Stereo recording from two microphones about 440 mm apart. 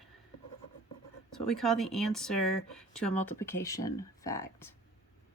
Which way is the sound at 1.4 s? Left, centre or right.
Centre.